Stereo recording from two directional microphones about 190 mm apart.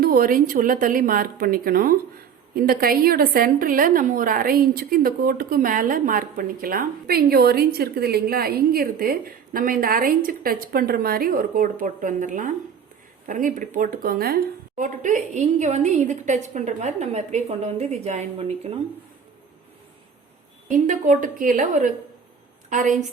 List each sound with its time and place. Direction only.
0.0 s a woman's voice: 50° right (ahead or behind)
14.8 s a woman's voice: 40° right (ahead or behind)
20.7 s a woman's voice: 45° right (ahead or behind)